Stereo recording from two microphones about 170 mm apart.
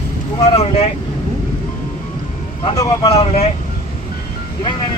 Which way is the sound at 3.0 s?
35° left (ahead or behind).